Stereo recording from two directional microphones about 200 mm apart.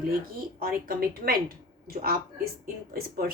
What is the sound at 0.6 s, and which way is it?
A woman's voice, 50° right (ahead or behind).